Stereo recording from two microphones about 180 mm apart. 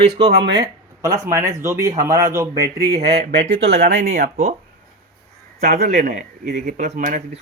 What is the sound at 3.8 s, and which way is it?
Speech, 60° right (ahead or behind).